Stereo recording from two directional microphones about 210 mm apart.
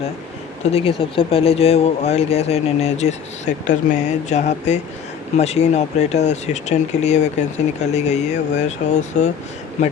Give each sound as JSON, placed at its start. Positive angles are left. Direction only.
{"t": 0.6, "sound": "speech", "side_deg": 30}